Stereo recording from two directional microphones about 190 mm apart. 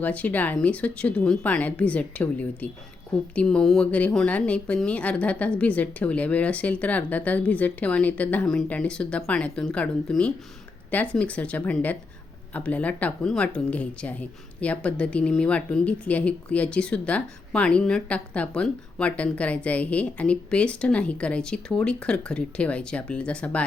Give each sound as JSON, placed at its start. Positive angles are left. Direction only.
{"t": 0.0, "sound": "speech", "side_deg": 5}